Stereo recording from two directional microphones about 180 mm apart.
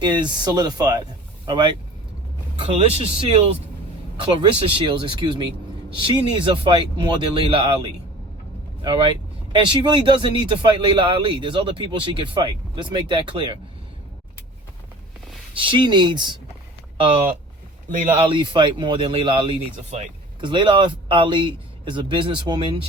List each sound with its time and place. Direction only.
0.0 s speech: 25° right (ahead or behind)
9.5 s speech: 25° right (ahead or behind)
15.5 s speech: 30° right (ahead or behind)